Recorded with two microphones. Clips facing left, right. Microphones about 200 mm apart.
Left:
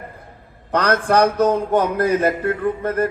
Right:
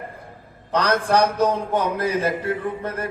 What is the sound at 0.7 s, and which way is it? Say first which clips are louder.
Mantra: left 2 dB; 55° left (ahead or behind).